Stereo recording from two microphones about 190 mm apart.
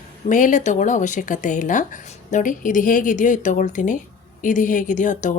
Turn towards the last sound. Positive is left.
turn(degrees=40)  # may be behind; listen again after turning